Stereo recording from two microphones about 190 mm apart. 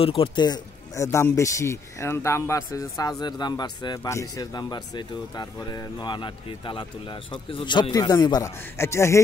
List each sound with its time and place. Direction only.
0.0 s a man's voice: 30° left (ahead or behind)